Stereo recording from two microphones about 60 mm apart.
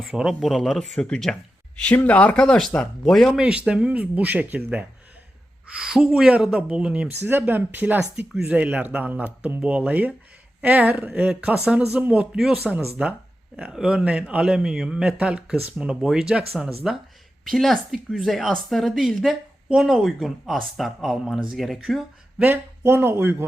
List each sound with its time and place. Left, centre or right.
0.1 s speech: centre
0.4 s speech: centre
0.9 s speech: centre
3.0 s speech: centre
3.3 s a man's voice: centre
5.8 s a man's voice: centre
6.5 s speech: centre
7.1 s a man's voice: right; by 12.3 s centre
12.7 s speech: centre
13.7 s a man's voice: centre
17.4 s speech: centre
22.8 s speech: right